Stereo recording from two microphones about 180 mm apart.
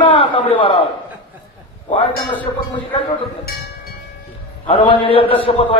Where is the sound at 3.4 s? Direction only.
55° left (ahead or behind).